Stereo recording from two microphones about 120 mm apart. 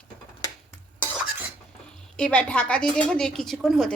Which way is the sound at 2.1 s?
10° left (ahead or behind).